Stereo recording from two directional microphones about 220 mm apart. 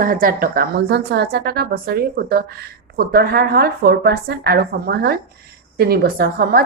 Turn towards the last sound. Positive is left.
turn(degrees=-45)  # may be behind; listen again after turning